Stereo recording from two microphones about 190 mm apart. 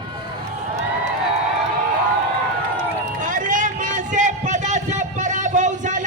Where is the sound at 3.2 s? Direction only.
40° right (ahead or behind).